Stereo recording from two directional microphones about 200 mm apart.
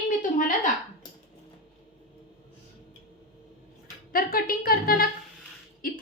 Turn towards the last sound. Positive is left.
turn(degrees=45)  # may be behind; listen again after turning